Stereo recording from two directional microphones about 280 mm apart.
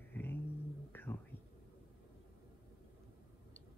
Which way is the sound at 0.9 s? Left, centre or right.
Centre.